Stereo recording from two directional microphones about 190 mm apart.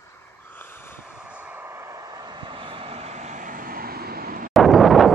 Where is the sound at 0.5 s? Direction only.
10° left (ahead or behind).